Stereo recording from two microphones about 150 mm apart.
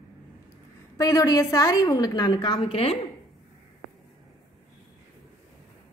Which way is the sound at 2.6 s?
40° left (ahead or behind).